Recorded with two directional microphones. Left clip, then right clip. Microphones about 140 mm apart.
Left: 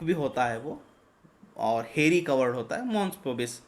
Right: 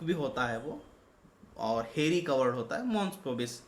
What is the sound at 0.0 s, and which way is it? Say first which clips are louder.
Speech: left 5 dB; 45° left (ahead or behind).